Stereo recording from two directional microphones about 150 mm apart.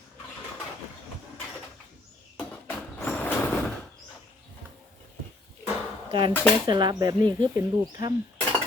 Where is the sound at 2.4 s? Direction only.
10° left (ahead or behind).